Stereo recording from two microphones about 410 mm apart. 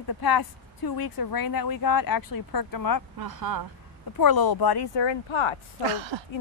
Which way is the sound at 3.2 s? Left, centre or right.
Right.